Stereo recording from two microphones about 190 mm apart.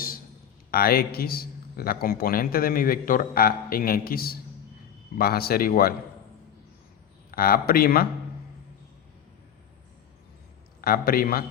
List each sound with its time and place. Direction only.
0.7 s a man's voice: 50° left (ahead or behind)
7.3 s speech: 50° left (ahead or behind)
10.8 s a man's voice: 50° left (ahead or behind)